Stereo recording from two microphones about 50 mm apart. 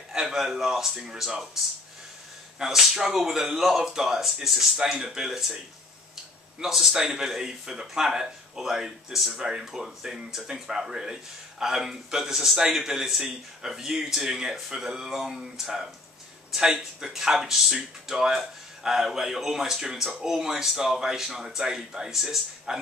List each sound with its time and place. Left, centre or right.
0.1 s speech: centre
2.6 s speech: centre
4.7 s speech: centre
6.6 s speech: centre